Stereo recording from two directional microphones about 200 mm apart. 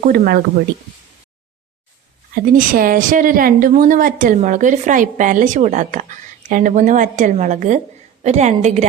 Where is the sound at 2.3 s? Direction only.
45° right (ahead or behind).